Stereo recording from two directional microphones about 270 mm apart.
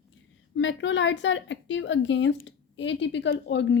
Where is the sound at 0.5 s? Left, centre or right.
Left.